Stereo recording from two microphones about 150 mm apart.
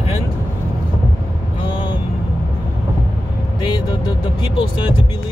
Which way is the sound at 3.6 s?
30° left (ahead or behind).